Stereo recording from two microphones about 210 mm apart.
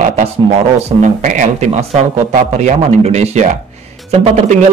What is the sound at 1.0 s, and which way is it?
A man's voice, 35° right (ahead or behind).